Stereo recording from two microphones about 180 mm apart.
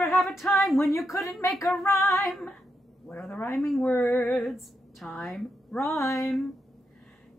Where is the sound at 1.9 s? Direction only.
15° left (ahead or behind).